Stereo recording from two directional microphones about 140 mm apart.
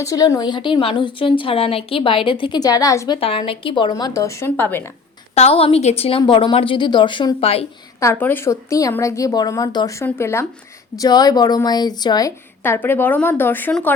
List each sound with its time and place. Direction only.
0.0 s a woman's voice: 25° left (ahead or behind)
3.2 s a woman's voice: 40° left (ahead or behind); by 4.8 s 15° left (ahead or behind)
5.3 s a woman's voice: 45° left (ahead or behind)
7.9 s a woman's voice: 20° left (ahead or behind)
12.6 s a woman's voice: 15° left (ahead or behind)